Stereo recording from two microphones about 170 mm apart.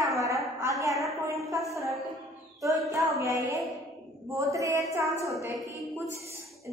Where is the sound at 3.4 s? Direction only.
20° right (ahead or behind).